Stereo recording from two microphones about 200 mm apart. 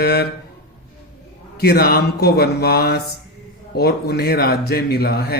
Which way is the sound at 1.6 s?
50° left (ahead or behind).